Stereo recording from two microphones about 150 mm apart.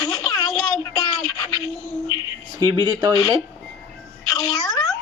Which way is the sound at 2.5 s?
30° right (ahead or behind).